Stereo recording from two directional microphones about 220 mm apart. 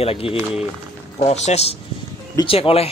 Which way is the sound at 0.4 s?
5° right (ahead or behind).